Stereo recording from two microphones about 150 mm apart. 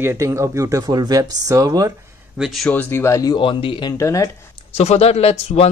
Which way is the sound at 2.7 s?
10° left (ahead or behind).